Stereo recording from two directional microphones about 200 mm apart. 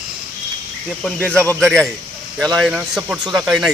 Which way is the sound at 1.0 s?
5° left (ahead or behind).